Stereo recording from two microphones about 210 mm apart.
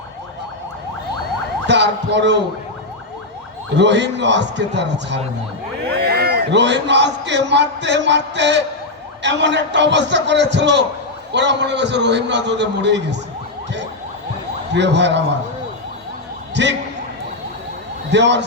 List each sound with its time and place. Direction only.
1.6 s a man's voice: 55° right (ahead or behind)
3.8 s a man's voice: 55° right (ahead or behind)
14.7 s a man's voice: 55° right (ahead or behind)
16.6 s a man's voice: 55° right (ahead or behind)
18.1 s a man's voice: 55° right (ahead or behind)